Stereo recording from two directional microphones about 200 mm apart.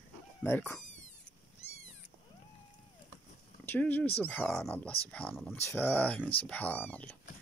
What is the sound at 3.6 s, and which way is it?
Speech, 10° left (ahead or behind).